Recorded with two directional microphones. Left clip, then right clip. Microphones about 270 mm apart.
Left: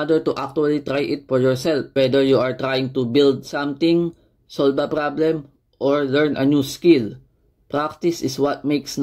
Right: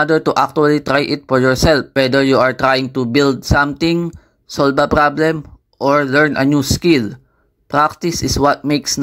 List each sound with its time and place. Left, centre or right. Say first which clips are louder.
0.0 s speech: right 7 dB; right
7.7 s speech: right 7 dB; right